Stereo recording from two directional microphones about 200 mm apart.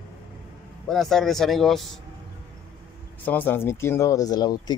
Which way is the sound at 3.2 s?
10° left (ahead or behind).